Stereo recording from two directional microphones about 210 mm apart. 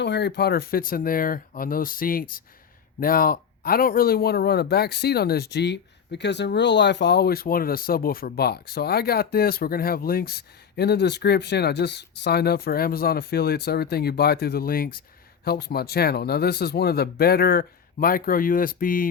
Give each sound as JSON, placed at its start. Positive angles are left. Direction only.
{"t": 0.0, "sound": "speech", "side_deg": 55}